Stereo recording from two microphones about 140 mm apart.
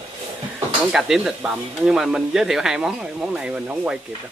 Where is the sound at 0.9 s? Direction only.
5° right (ahead or behind).